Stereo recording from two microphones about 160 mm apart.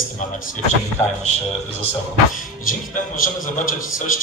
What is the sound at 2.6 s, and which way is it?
Speech, 60° left (ahead or behind).